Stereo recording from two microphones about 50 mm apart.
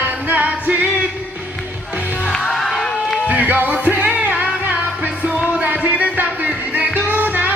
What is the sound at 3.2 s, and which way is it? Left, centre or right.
Music, right.